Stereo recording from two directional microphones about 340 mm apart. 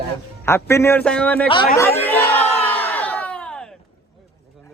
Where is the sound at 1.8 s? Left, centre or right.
Centre.